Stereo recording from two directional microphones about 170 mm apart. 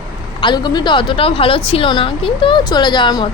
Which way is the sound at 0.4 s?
25° left (ahead or behind).